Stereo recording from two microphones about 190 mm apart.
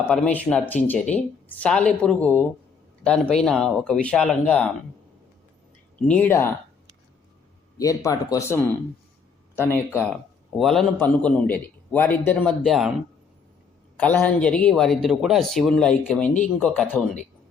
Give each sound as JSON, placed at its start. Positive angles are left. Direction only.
{"t": 0.1, "sound": "a man's voice", "side_deg": 5}
{"t": 6.1, "sound": "a man's voice", "side_deg": 10}
{"t": 7.8, "sound": "a man's voice", "side_deg": 15}
{"t": 10.6, "sound": "a man's voice", "side_deg": 0}
{"t": 14.0, "sound": "speech", "side_deg": 5}